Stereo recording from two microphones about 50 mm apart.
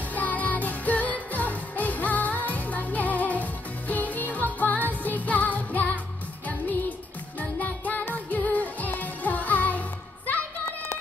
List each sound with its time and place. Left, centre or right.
0.1 s music: left
7.3 s music: left